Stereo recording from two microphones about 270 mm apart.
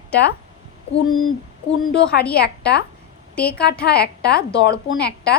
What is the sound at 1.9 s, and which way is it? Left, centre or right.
A woman's voice, left.